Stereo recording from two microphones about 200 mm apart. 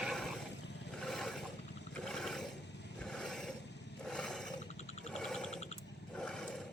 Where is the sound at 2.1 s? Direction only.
Centre (ahead or behind).